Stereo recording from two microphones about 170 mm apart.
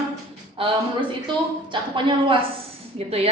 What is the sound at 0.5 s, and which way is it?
A woman's voice, 30° right (ahead or behind).